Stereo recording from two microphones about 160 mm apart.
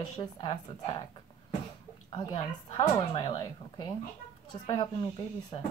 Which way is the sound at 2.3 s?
30° left (ahead or behind).